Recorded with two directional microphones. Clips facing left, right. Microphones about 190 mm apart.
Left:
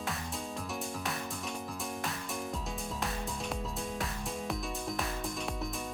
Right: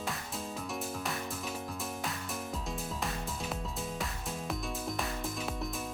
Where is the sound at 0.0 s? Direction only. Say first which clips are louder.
Even; centre (ahead or behind).